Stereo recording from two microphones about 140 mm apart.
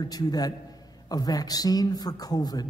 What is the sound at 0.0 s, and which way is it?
A man's voice, 30° left (ahead or behind).